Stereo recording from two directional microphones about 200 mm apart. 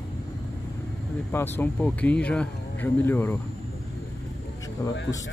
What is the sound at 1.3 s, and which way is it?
Speech, 10° left (ahead or behind).